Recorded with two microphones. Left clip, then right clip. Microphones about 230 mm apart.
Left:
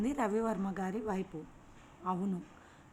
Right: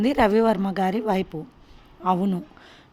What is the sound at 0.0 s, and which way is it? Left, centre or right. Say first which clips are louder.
A woman's voice: right 15 dB; right.